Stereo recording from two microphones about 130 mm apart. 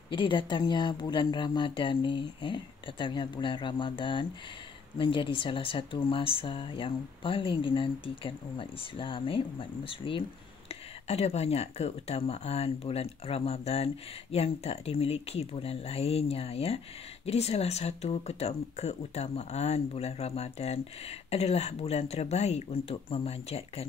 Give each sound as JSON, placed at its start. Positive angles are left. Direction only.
{"t": 0.1, "sound": "speech", "side_deg": 40}
{"t": 11.1, "sound": "speech", "side_deg": 55}